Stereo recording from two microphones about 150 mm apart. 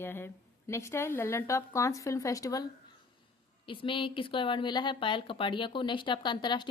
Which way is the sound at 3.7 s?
35° left (ahead or behind).